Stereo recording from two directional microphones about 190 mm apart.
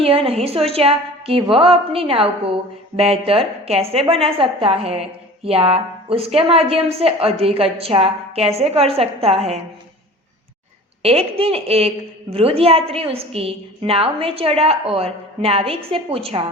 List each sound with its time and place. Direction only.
0.0 s a woman's voice: 30° right (ahead or behind)
11.0 s a woman's voice: 30° right (ahead or behind)